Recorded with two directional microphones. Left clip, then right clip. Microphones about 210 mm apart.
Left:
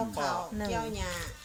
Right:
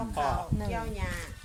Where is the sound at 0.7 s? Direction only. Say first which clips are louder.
Left 3 dB; 40° left (ahead or behind).